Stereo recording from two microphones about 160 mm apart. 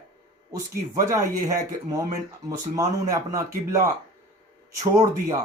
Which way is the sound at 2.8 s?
20° right (ahead or behind).